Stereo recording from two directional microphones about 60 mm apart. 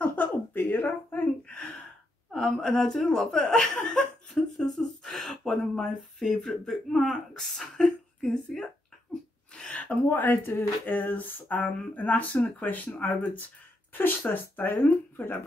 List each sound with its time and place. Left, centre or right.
0.0 s a sound: left
2.3 s speech: centre
9.7 s speech: left